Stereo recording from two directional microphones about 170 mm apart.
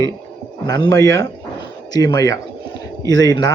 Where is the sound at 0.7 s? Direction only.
20° left (ahead or behind).